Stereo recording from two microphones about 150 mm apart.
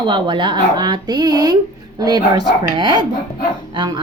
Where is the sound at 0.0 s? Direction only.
30° right (ahead or behind).